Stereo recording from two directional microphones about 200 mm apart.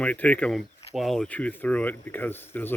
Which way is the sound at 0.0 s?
5° left (ahead or behind).